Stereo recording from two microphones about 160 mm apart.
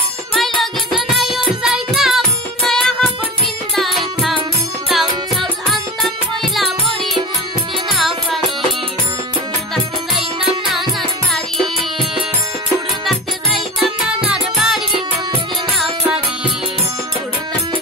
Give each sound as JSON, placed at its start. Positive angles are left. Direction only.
{"t": 1.0, "sound": "music", "side_deg": 0}
{"t": 7.9, "sound": "music", "side_deg": 0}
{"t": 10.1, "sound": "music", "side_deg": 0}
{"t": 11.5, "sound": "music", "side_deg": -30}
{"t": 14.0, "sound": "music", "side_deg": -5}